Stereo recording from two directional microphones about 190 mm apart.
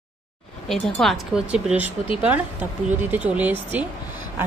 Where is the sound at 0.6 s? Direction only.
Centre (ahead or behind).